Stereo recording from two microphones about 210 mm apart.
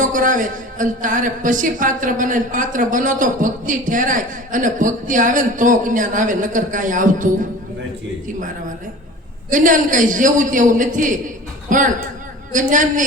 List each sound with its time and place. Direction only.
0.0 s speech: 40° right (ahead or behind)
9.5 s speech: 40° right (ahead or behind)